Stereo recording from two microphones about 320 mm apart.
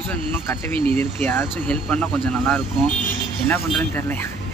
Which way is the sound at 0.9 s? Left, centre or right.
Centre.